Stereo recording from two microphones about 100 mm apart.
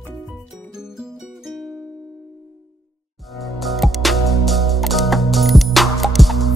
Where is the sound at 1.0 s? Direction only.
5° right (ahead or behind).